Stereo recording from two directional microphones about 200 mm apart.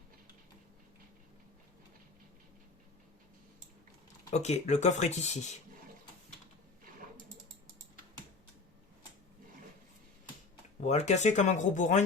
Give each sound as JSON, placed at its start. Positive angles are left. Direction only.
{"t": 4.3, "sound": "speech", "side_deg": 35}
{"t": 10.8, "sound": "speech", "side_deg": 35}